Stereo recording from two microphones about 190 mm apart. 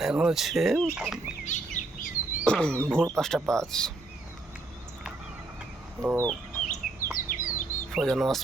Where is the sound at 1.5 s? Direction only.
40° left (ahead or behind).